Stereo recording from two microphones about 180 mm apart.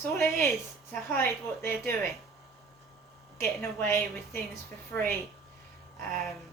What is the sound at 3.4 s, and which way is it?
A woman's voice, 15° left (ahead or behind).